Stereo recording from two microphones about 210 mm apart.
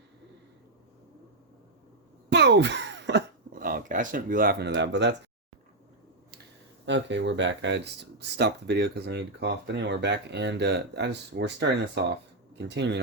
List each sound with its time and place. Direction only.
2.3 s a sound: 55° right (ahead or behind)
3.5 s speech: 40° right (ahead or behind); by 5.1 s 60° right (ahead or behind)
6.8 s speech: 60° right (ahead or behind)